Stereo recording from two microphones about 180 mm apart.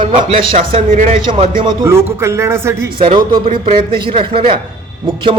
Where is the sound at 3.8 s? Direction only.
25° right (ahead or behind).